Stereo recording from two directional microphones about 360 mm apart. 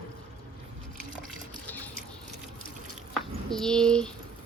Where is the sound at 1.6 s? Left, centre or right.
Centre.